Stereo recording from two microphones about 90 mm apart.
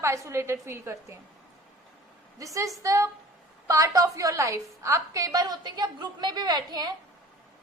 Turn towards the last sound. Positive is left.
turn(degrees=-50)  # may be behind; listen again after turning